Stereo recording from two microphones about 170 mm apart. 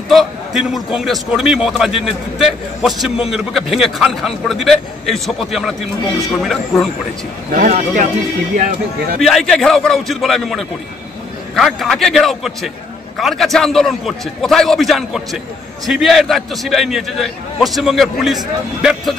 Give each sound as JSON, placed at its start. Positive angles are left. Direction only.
{"t": 0.1, "sound": "a man's voice", "side_deg": 0}
{"t": 7.5, "sound": "speech", "side_deg": -55}
{"t": 9.2, "sound": "a man's voice", "side_deg": 0}